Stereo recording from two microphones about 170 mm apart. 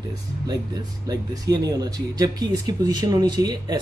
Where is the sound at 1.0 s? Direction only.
20° right (ahead or behind).